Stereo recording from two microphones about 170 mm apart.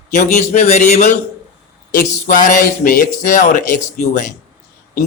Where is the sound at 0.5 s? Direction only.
40° left (ahead or behind).